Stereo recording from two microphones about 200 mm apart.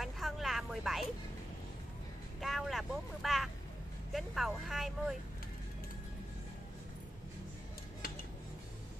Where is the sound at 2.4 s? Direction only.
Centre (ahead or behind).